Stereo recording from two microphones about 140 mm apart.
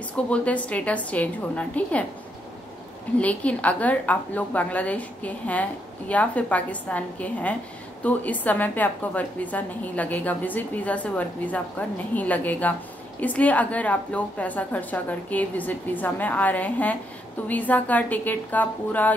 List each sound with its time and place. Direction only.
0.3 s a woman's voice: 10° left (ahead or behind)
3.2 s a woman's voice: 10° left (ahead or behind)